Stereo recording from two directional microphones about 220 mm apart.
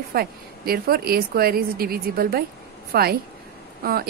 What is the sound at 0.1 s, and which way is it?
A woman's voice, 45° right (ahead or behind).